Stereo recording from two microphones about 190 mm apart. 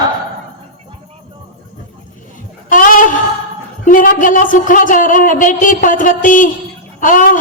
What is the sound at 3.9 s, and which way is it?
Speech, 45° left (ahead or behind).